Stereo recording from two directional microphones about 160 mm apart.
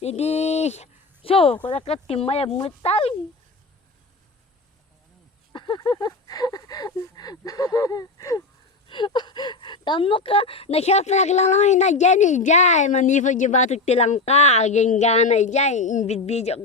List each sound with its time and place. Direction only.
0.0 s speech: 40° left (ahead or behind)
5.5 s a sound: 30° left (ahead or behind)
8.9 s a woman's voice: 30° left (ahead or behind)